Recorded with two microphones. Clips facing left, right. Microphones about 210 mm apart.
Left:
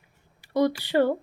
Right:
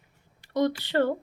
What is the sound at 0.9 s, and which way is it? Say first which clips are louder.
Speech: left 4 dB; 10° left (ahead or behind).